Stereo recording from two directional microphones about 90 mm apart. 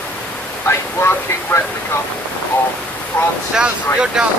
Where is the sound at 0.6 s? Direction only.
25° left (ahead or behind).